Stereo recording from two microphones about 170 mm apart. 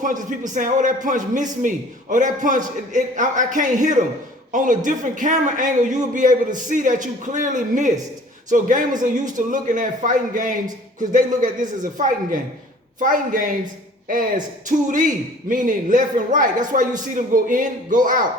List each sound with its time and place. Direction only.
0.0 s a man's voice: 50° right (ahead or behind)